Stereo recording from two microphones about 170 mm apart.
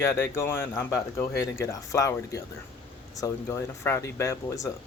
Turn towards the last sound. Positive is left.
turn(degrees=15)  # may be behind; listen again after turning